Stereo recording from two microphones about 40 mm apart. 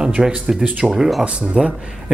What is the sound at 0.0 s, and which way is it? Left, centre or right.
Speech, right.